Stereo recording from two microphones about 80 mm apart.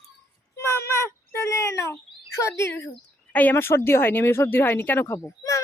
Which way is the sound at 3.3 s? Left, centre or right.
Left.